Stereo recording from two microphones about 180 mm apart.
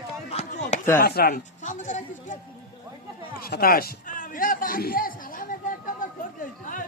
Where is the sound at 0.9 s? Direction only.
55° left (ahead or behind).